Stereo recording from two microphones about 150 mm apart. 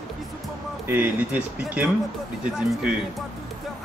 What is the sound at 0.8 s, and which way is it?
Speech, 15° right (ahead or behind).